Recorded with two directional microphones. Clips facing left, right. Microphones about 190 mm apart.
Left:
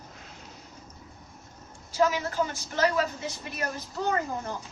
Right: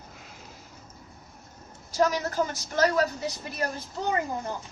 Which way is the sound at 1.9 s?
40° right (ahead or behind).